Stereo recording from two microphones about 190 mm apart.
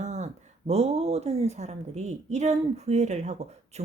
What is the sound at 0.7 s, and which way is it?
A woman's voice, 35° right (ahead or behind).